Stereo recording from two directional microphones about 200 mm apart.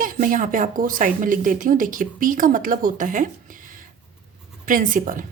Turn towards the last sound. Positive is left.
turn(degrees=-40)  # may be behind; listen again after turning